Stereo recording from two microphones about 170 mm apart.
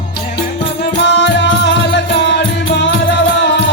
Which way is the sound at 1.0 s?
85° left.